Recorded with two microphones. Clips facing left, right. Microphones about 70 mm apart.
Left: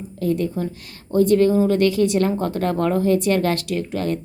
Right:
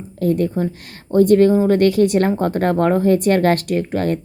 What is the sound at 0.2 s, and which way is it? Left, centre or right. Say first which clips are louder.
A woman's voice: right 4 dB; right.